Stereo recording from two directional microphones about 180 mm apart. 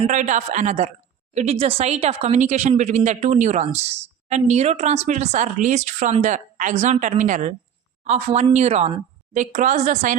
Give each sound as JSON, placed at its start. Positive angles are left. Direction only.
{"t": 0.0, "sound": "a man's voice", "side_deg": -45}